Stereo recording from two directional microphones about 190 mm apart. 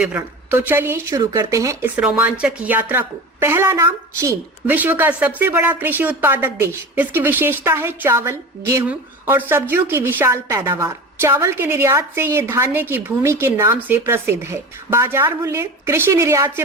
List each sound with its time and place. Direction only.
0.2 s a woman's voice: 10° right (ahead or behind)